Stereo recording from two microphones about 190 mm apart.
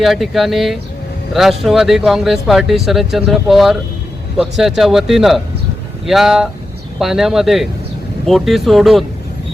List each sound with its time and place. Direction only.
0.0 s speech: centre (ahead or behind)